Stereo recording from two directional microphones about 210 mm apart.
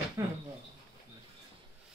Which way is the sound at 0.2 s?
15° right (ahead or behind).